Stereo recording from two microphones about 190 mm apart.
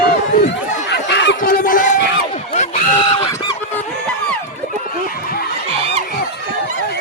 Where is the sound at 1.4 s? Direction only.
45° left (ahead or behind).